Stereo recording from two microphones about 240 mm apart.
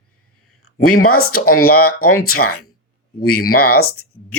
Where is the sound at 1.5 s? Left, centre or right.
Left.